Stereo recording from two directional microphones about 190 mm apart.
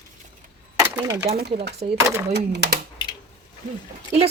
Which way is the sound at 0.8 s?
15° right (ahead or behind).